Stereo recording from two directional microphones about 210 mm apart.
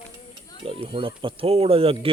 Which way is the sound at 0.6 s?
25° right (ahead or behind).